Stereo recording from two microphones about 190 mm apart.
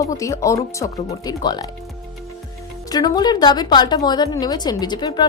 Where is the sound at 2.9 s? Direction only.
20° left (ahead or behind).